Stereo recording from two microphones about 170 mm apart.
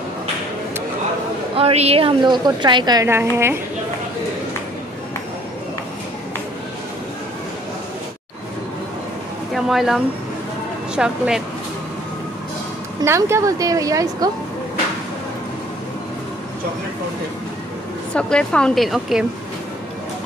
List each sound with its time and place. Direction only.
1.6 s a woman's voice: 35° right (ahead or behind); by 3.5 s 15° right (ahead or behind)
9.5 s a woman's voice: centre (ahead or behind)
13.0 s a woman's voice: 15° right (ahead or behind)
18.1 s a woman's voice: 5° left (ahead or behind)